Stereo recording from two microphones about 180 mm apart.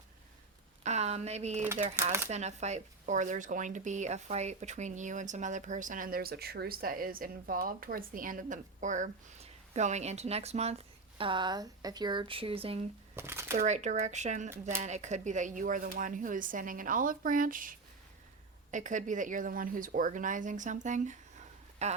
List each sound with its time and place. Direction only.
0.9 s a sound: 35° right (ahead or behind)
1.8 s speech: 40° right (ahead or behind)
13.1 s shuffling cards: 15° right (ahead or behind)
13.6 s speech: 40° right (ahead or behind)